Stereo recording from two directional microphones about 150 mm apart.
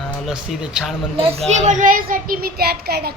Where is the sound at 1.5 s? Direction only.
55° right (ahead or behind); by 3.2 s 90° right.